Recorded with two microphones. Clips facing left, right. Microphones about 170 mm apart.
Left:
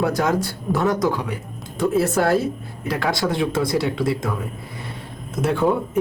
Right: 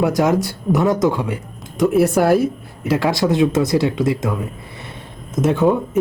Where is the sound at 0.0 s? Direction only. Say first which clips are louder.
Right 4 dB; 20° right (ahead or behind).